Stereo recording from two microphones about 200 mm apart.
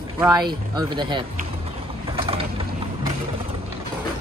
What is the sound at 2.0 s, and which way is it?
Mechanisms, 25° right (ahead or behind).